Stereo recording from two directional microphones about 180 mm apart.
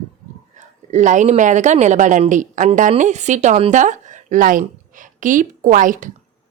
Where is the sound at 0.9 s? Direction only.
40° right (ahead or behind).